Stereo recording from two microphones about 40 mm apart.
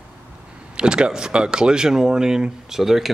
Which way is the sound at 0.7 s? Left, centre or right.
Right.